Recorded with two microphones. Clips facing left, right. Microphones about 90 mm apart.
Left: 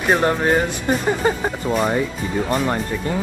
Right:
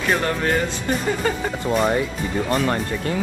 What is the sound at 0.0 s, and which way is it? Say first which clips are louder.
Speech: left 4 dB; 25° left (ahead or behind).